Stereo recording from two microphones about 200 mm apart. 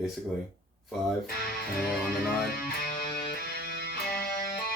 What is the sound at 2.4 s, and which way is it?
Music, 50° left (ahead or behind).